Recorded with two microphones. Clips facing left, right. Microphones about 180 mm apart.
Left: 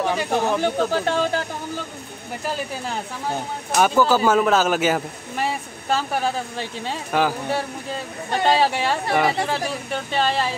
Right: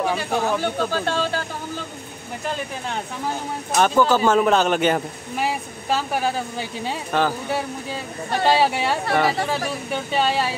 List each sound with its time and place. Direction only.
0.0 s speech: 5° right (ahead or behind)
0.7 s speech: 15° left (ahead or behind)
3.7 s speech: 5° left (ahead or behind)